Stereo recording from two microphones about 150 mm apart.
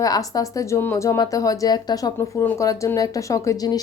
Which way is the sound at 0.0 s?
25° left (ahead or behind).